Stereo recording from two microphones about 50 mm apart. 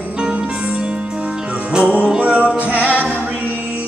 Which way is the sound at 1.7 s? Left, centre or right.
Right.